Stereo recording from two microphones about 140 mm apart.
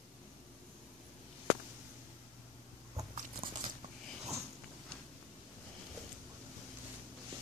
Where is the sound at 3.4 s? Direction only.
90° right.